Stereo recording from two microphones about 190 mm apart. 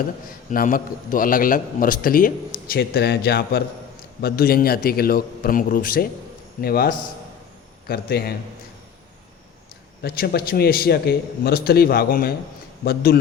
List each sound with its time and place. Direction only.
0.5 s a man's voice: 45° left (ahead or behind)
10.0 s a man's voice: 55° left (ahead or behind)